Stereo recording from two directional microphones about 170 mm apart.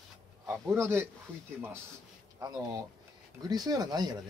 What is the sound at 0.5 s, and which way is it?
Speech, 15° right (ahead or behind).